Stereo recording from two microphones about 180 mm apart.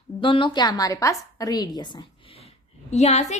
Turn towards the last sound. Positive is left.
turn(degrees=40)  # may be behind; listen again after turning